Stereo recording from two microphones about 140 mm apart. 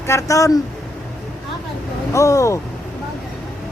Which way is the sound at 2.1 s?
20° left (ahead or behind).